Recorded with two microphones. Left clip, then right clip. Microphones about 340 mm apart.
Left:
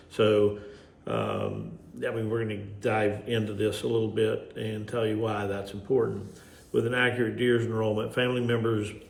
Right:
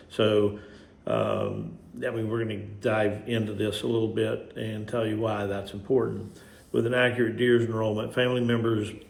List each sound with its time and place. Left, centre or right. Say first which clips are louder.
0.2 s a man's voice: left 1 dB; centre